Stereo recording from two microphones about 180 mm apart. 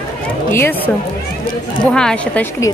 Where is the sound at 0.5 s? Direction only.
10° left (ahead or behind).